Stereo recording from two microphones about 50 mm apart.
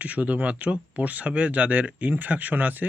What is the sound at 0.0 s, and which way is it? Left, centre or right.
Speech, right.